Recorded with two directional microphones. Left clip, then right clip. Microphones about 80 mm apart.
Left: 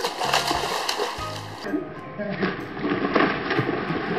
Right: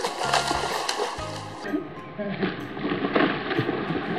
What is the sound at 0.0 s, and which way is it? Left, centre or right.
Music, centre.